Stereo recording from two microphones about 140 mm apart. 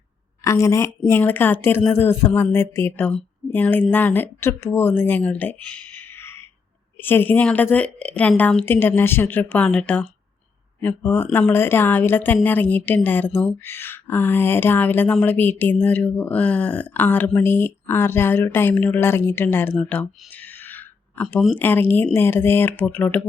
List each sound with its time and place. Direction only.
0.4 s a woman's voice: 20° left (ahead or behind)